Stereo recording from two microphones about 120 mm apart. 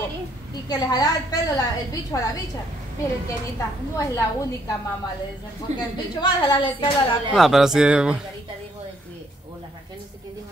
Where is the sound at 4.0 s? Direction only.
30° left (ahead or behind).